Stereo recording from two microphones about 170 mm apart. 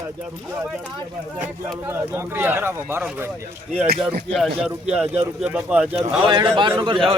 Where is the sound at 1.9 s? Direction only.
15° right (ahead or behind).